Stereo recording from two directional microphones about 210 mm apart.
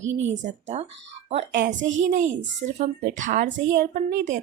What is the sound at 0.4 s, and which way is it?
A woman's voice, 35° right (ahead or behind).